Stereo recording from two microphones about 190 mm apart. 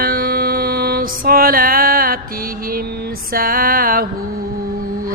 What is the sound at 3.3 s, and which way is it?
Music, 50° right (ahead or behind).